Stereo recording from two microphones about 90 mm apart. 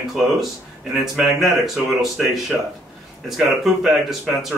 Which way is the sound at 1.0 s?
Centre (ahead or behind).